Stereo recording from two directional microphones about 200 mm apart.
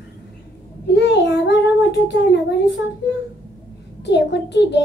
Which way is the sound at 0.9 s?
60° left (ahead or behind).